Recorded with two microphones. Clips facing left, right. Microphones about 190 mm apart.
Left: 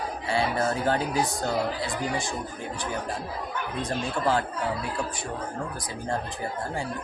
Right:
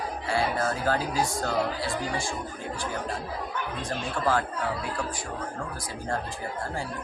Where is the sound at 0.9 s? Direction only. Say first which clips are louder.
Left 1 dB; 20° left (ahead or behind).